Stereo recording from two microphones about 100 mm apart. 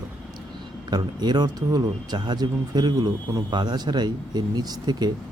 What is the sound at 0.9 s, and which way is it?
Speech, 45° right (ahead or behind).